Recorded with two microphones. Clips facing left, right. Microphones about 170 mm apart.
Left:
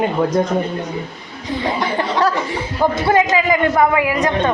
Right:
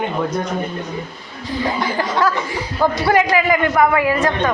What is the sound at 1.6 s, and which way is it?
Chuckle, 25° left (ahead or behind).